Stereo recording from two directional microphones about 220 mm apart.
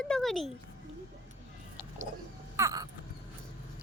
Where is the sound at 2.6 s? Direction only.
15° right (ahead or behind).